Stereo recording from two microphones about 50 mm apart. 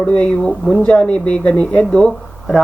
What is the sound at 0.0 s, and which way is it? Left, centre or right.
Speech, left.